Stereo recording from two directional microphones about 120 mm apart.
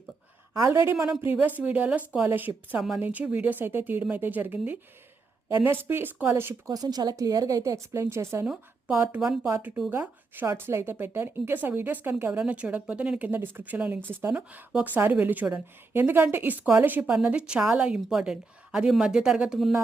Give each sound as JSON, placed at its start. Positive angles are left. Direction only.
{"t": 0.5, "sound": "a woman's voice", "side_deg": -25}
{"t": 9.2, "sound": "a woman's voice", "side_deg": -5}